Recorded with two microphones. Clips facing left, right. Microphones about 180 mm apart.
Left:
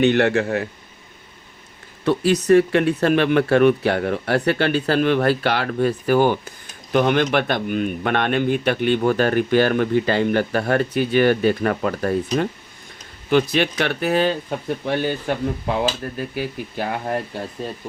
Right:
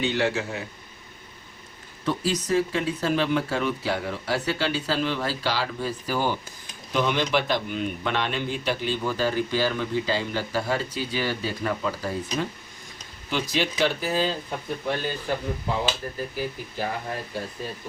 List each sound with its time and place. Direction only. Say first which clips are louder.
0.0 s speech: left 8 dB; 65° left (ahead or behind)
2.0 s speech: left 9 dB; 65° left (ahead or behind)